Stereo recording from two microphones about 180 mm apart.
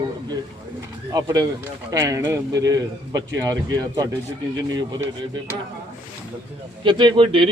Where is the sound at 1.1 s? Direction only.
20° right (ahead or behind).